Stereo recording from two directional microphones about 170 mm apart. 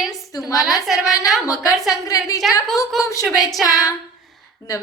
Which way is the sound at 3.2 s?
Centre (ahead or behind).